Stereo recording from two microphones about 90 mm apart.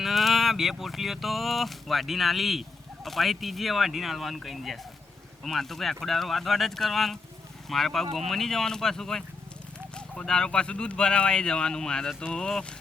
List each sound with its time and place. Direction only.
0.0 s speech: centre (ahead or behind)